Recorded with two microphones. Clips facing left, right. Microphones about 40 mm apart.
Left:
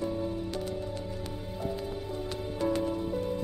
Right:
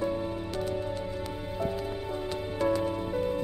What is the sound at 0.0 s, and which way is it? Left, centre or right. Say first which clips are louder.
Music: right 2 dB; right.